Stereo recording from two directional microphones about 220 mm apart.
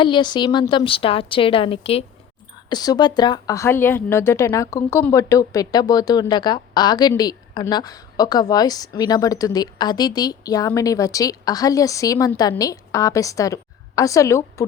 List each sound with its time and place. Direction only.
0.0 s a woman's voice: 20° left (ahead or behind)